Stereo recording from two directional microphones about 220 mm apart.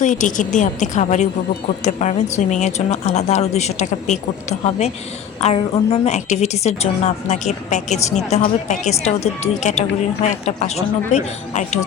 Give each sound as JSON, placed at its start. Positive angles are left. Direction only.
{"t": 0.0, "sound": "a woman's voice", "side_deg": 35}